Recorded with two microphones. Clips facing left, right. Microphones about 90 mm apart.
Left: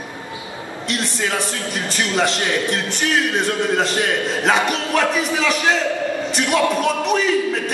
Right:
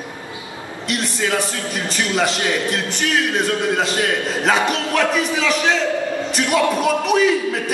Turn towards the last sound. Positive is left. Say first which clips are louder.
# right 2 dB
turn(degrees=-5)  # may be behind; listen again after turning